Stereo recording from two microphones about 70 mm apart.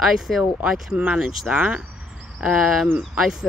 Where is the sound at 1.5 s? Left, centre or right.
Right.